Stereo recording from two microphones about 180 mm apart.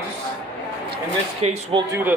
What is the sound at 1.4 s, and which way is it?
Speech, 35° right (ahead or behind).